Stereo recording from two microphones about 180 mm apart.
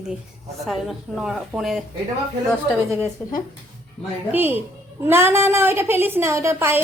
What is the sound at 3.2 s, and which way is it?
Speech, 10° left (ahead or behind).